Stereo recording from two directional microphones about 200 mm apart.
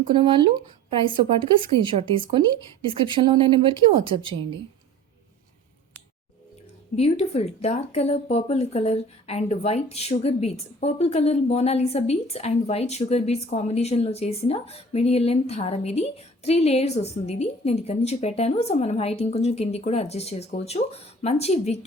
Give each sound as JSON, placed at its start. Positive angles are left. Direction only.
{"t": 0.1, "sound": "speech", "side_deg": -25}
{"t": 6.9, "sound": "speech", "side_deg": 30}